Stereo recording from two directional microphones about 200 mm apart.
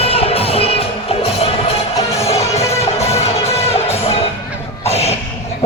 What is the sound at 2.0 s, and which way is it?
Music, 15° left (ahead or behind).